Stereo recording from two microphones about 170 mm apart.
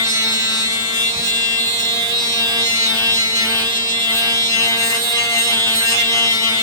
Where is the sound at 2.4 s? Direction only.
20° right (ahead or behind).